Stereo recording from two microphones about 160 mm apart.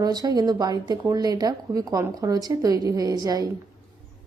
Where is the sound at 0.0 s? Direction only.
25° right (ahead or behind).